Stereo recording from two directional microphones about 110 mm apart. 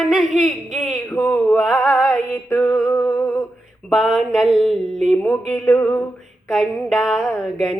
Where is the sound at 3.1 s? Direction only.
20° left (ahead or behind).